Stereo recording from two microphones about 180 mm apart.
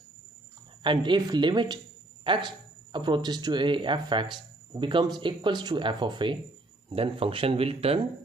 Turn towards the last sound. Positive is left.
turn(degrees=-35)  # may be behind; listen again after turning